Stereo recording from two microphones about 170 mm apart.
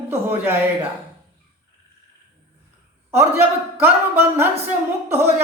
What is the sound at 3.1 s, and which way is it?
A man's voice, 15° right (ahead or behind).